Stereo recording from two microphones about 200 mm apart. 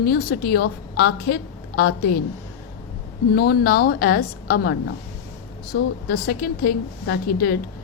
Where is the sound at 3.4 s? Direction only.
50° left (ahead or behind).